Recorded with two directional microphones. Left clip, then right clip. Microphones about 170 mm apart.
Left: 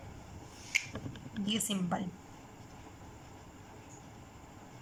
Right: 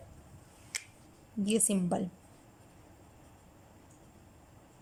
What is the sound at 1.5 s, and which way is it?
Speech, 25° right (ahead or behind).